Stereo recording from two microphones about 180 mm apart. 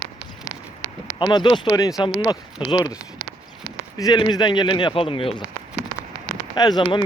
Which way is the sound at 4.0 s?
25° left (ahead or behind).